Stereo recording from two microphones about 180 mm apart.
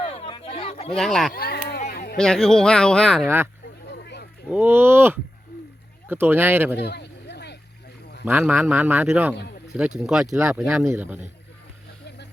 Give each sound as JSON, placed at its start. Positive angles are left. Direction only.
{"t": 0.0, "sound": "a sound", "side_deg": 30}
{"t": 0.9, "sound": "speech", "side_deg": 5}
{"t": 1.3, "sound": "a sound", "side_deg": 55}
{"t": 2.1, "sound": "speech", "side_deg": 5}
{"t": 3.2, "sound": "speech", "side_deg": -15}
{"t": 3.9, "sound": "a sound", "side_deg": 65}
{"t": 4.4, "sound": "speech", "side_deg": -10}
{"t": 6.7, "sound": "a sound", "side_deg": 70}
{"t": 8.2, "sound": "speech", "side_deg": -10}
{"t": 9.3, "sound": "speech", "side_deg": 65}
{"t": 9.7, "sound": "speech", "side_deg": -5}
{"t": 10.3, "sound": "speech", "side_deg": -15}
{"t": 10.6, "sound": "speech", "side_deg": 0}
{"t": 12.0, "sound": "vehicle", "side_deg": 70}